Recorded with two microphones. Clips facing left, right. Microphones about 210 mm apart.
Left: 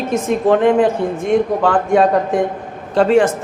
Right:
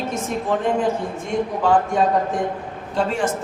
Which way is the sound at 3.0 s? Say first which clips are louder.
Left 11 dB; 80° left.